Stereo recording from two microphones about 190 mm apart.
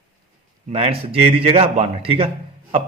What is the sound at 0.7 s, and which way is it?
A man's voice, 30° right (ahead or behind).